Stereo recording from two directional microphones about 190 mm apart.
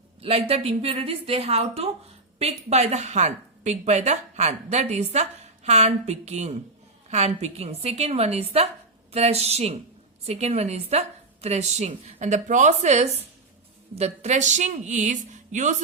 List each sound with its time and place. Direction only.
0.2 s a woman's voice: 30° right (ahead or behind)